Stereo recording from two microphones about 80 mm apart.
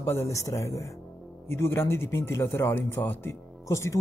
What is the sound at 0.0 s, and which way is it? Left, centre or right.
Speech, left.